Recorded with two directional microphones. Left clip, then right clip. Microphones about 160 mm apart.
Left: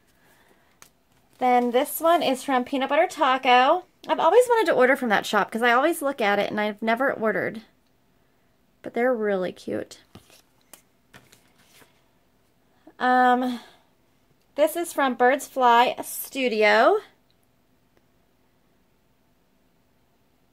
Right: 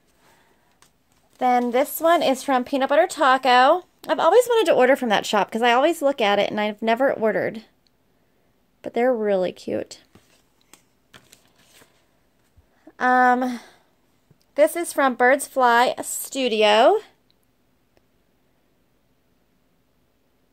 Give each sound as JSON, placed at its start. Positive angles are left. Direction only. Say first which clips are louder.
{"t": 1.4, "sound": "speech", "louder": "right 1 dB", "side_deg": -50}
{"t": 8.8, "sound": "speech", "louder": "right 3 dB", "side_deg": -25}
{"t": 12.8, "sound": "speech", "louder": "right 2 dB", "side_deg": -45}
{"t": 16.5, "sound": "speech", "louder": "right 2 dB", "side_deg": -30}